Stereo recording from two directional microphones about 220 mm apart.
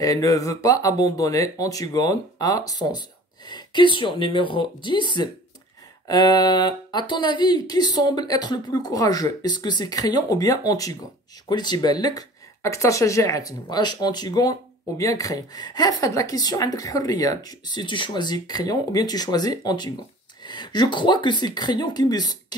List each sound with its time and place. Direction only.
0.0 s speech: 15° left (ahead or behind)